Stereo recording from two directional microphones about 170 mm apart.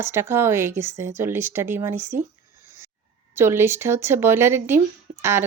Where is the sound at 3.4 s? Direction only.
15° right (ahead or behind).